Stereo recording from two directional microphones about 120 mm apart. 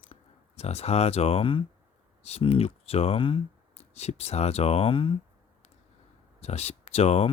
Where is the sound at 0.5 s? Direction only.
60° left (ahead or behind).